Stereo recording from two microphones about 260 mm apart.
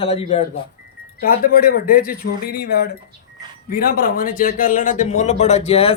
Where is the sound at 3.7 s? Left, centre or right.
Left.